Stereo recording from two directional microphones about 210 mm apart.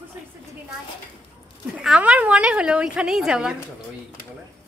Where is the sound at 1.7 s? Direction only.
5° right (ahead or behind).